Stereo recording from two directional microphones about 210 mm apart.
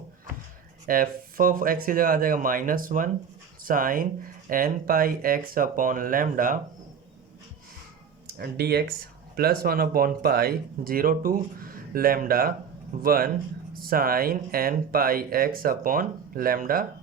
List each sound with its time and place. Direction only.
0.9 s speech: 40° right (ahead or behind)
8.4 s speech: 50° right (ahead or behind)